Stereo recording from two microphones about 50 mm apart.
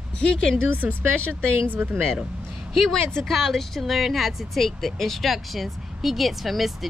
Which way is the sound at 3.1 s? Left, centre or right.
Centre.